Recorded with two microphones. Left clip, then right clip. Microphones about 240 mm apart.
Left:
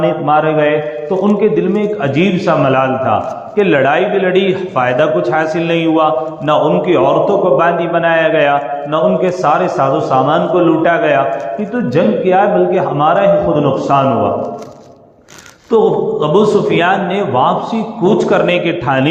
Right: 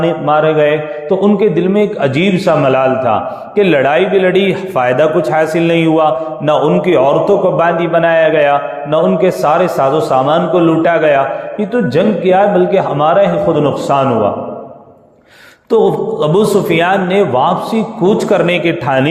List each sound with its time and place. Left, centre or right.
0.0 s a man's voice: right
15.7 s a man's voice: right